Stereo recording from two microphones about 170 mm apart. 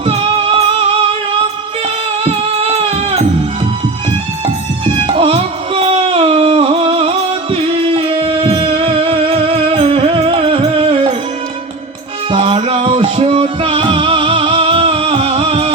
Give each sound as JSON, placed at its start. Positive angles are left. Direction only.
{"t": 0.0, "sound": "music", "side_deg": -35}
{"t": 4.9, "sound": "music", "side_deg": -30}
{"t": 12.3, "sound": "music", "side_deg": -30}